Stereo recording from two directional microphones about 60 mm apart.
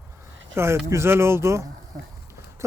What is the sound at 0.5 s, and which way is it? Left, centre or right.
Speech, right.